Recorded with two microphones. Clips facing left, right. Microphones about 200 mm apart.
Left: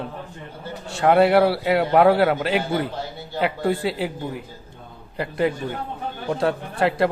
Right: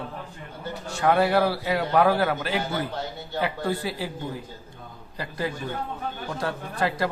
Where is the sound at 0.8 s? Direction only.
30° left (ahead or behind).